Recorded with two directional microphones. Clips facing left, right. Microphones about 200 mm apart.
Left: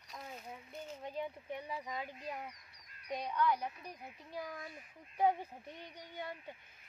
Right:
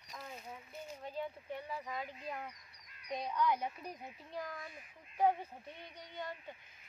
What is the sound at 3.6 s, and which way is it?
Speech, 30° right (ahead or behind).